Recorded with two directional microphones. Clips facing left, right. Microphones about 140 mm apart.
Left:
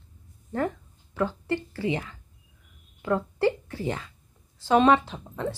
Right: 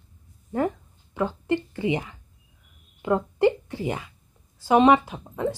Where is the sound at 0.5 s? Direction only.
15° right (ahead or behind).